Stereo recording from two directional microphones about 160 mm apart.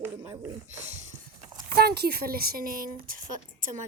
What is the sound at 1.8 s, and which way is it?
Speech, 85° right.